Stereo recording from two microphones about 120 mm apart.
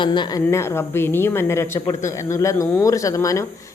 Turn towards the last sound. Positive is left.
turn(degrees=25)  # may be behind; listen again after turning